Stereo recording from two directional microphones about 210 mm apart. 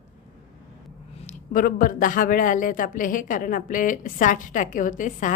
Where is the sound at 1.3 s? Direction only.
40° left (ahead or behind).